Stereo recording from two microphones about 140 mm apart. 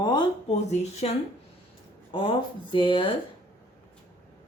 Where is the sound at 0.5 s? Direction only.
55° left (ahead or behind).